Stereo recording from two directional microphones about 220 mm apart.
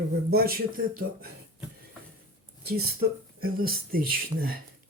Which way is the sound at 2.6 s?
45° right (ahead or behind).